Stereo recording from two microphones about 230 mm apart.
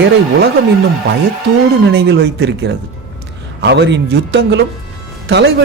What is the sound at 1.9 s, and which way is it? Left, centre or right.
A man's voice, right.